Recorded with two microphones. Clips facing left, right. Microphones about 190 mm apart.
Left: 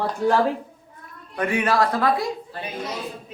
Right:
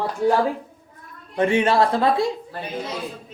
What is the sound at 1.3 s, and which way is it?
Speech, 25° right (ahead or behind).